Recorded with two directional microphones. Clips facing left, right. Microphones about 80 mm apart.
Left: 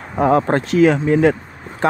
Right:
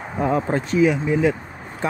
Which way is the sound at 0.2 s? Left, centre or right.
Left.